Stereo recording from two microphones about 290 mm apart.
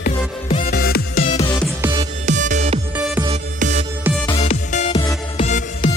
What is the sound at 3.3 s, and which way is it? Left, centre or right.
Music, right.